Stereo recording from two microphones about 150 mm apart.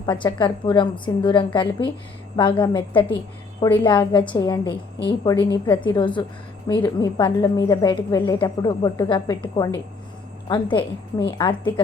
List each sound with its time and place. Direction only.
0.0 s a woman's voice: 30° left (ahead or behind)